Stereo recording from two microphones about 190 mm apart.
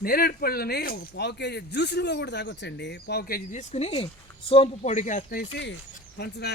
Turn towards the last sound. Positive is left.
turn(degrees=60)  # may be behind; listen again after turning